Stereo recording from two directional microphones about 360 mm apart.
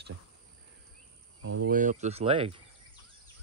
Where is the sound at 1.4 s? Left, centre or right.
Right.